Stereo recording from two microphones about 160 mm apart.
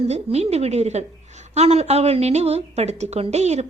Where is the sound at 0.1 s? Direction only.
40° right (ahead or behind).